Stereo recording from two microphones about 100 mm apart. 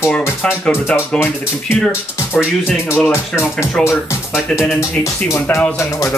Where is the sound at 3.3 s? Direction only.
25° left (ahead or behind).